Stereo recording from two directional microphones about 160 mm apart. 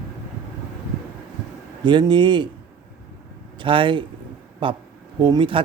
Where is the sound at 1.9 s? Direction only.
30° right (ahead or behind).